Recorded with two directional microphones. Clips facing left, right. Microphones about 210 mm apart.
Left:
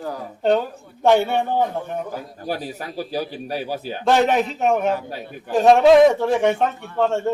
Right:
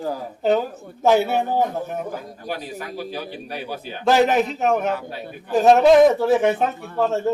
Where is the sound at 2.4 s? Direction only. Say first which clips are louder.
Left 4 dB; 40° left (ahead or behind).